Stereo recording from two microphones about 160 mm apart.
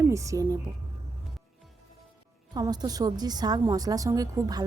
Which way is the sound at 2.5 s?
25° right (ahead or behind).